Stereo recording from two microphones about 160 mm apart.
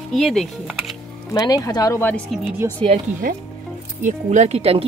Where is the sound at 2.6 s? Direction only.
15° right (ahead or behind).